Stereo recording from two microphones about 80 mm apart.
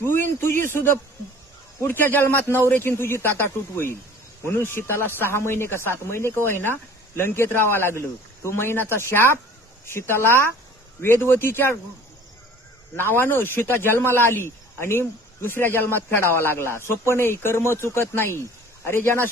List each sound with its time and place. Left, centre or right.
0.0 s speech: left
13.0 s speech: left